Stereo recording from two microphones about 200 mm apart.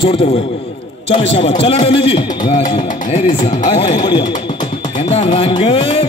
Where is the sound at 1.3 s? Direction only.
25° left (ahead or behind).